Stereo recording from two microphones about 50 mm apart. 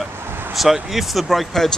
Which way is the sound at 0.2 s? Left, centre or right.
Right.